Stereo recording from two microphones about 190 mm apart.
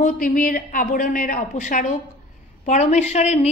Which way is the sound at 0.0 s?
45° left (ahead or behind).